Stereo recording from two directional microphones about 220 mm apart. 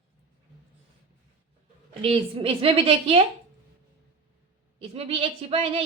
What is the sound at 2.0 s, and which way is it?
Speech, 25° right (ahead or behind).